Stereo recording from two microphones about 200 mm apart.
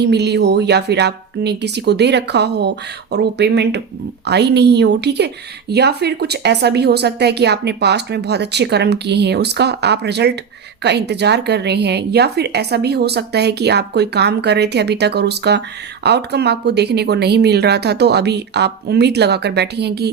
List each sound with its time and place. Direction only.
0.0 s a woman's voice: 55° right (ahead or behind)